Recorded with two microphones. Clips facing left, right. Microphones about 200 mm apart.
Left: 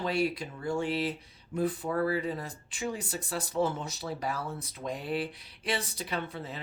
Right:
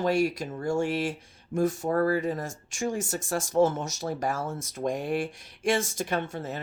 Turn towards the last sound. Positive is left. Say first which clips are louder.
# right 5 dB
turn(degrees=-45)  # may be behind; listen again after turning